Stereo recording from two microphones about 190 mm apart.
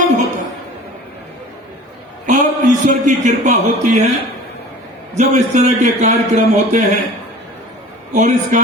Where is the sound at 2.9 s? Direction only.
40° right (ahead or behind).